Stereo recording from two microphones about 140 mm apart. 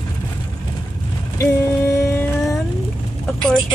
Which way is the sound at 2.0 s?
20° left (ahead or behind).